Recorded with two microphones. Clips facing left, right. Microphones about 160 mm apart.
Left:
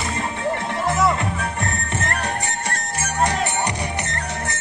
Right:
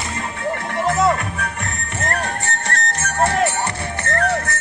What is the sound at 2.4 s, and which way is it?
Music, 15° left (ahead or behind).